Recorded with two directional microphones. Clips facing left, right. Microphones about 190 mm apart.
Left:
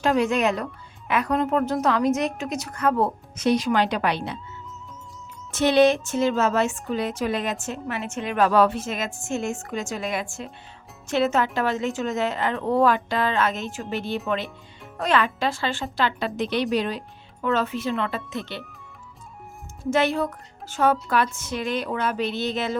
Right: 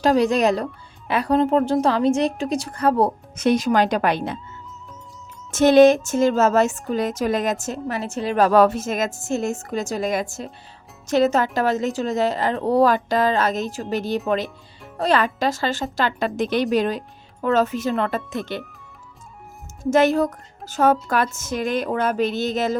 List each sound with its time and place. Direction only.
0.0 s speech: 35° right (ahead or behind)
3.3 s speech: 50° right (ahead or behind)
5.5 s speech: 45° right (ahead or behind)
19.8 s speech: 45° right (ahead or behind)